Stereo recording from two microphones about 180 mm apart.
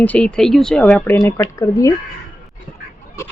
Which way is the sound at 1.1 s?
15° left (ahead or behind).